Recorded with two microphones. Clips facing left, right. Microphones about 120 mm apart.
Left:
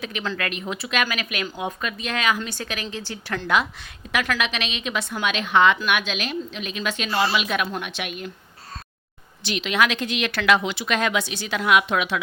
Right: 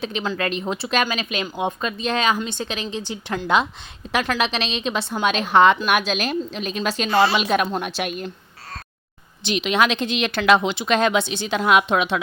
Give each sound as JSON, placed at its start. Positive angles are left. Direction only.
{"t": 0.0, "sound": "a woman's voice", "side_deg": -30}
{"t": 9.4, "sound": "speech", "side_deg": -20}